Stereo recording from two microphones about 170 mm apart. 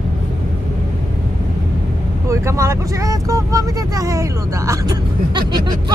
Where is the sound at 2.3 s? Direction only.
15° right (ahead or behind).